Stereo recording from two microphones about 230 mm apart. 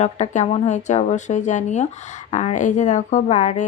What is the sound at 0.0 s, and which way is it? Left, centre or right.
Speech, left.